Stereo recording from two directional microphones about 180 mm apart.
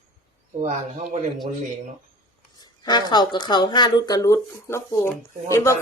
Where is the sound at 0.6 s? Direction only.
40° right (ahead or behind).